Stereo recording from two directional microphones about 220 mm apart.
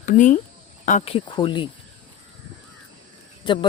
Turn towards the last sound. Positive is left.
turn(degrees=20)  # may be behind; listen again after turning